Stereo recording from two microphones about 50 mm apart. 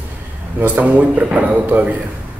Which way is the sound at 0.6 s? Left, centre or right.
Right.